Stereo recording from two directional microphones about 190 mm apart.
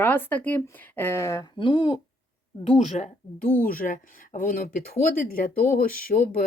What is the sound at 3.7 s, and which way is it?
Speech, 45° left (ahead or behind).